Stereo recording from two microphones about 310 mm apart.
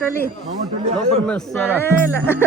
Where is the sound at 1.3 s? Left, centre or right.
Centre.